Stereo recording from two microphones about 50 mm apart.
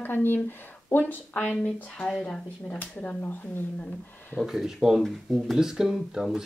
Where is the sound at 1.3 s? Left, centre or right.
Left.